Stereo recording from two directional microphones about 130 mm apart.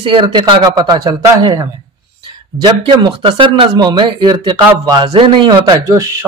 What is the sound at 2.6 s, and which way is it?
Speech, 35° right (ahead or behind).